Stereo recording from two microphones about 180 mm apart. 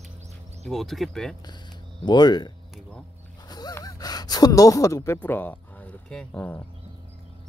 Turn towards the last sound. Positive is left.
turn(degrees=10)  # may be behind; listen again after turning